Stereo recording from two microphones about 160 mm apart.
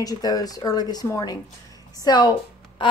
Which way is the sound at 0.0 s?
25° left (ahead or behind).